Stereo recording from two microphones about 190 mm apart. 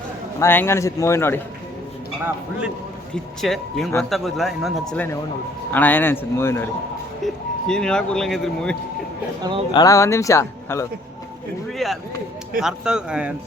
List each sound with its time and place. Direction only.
0.3 s speech: 10° left (ahead or behind)
2.2 s speech: 5° right (ahead or behind); by 6.7 s 15° left (ahead or behind)
7.7 s speech: 5° left (ahead or behind)
9.7 s speech: 15° left (ahead or behind)
11.8 s speech: centre (ahead or behind)